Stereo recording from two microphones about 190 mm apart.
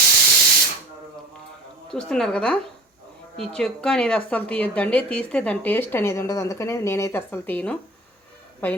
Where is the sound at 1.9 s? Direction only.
5° left (ahead or behind).